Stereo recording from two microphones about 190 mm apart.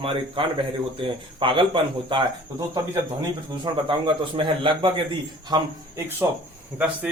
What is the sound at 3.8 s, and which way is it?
A man's voice, 25° right (ahead or behind).